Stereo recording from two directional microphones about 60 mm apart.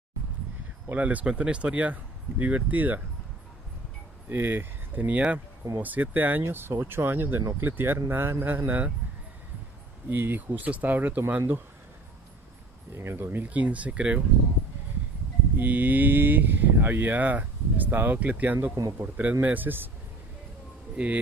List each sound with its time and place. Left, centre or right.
0.8 s speech: right
4.3 s speech: right
10.0 s speech: right
12.9 s speech: right
13.5 s speech: right
15.6 s speech: right
20.9 s speech: right